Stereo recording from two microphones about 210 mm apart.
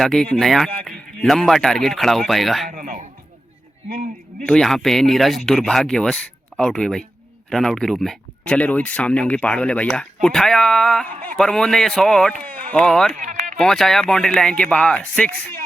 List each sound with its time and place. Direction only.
0.0 s speech: centre (ahead or behind)
2.6 s a man's voice: 40° right (ahead or behind)
4.4 s speech: 5° left (ahead or behind)
12.5 s a sound: 40° right (ahead or behind)
12.7 s speech: 5° left (ahead or behind)
13.1 s a sound: 35° right (ahead or behind)
13.6 s speech: centre (ahead or behind)